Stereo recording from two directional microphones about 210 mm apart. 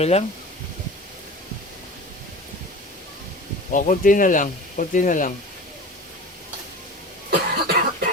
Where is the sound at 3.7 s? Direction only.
40° left (ahead or behind).